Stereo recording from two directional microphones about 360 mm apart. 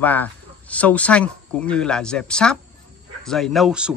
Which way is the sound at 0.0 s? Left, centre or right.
Centre.